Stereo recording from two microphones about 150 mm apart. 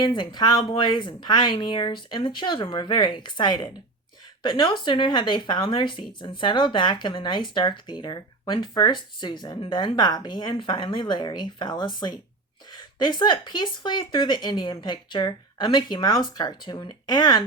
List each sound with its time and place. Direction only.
0.0 s speech: 30° left (ahead or behind)